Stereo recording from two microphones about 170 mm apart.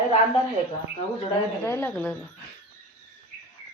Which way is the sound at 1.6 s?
10° left (ahead or behind).